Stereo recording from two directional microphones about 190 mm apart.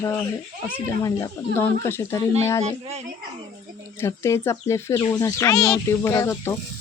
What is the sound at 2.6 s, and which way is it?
Speech, 35° right (ahead or behind).